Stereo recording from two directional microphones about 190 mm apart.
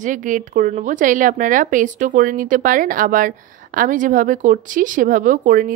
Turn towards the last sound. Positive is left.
turn(degrees=-45)  # may be behind; listen again after turning